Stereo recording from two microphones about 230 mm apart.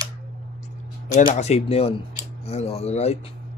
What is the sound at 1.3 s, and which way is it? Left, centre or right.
Speech, left.